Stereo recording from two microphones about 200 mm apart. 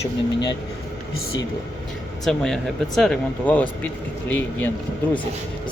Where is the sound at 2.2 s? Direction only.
Centre (ahead or behind).